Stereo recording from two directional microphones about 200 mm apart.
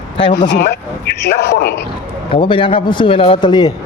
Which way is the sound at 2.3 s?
25° left (ahead or behind).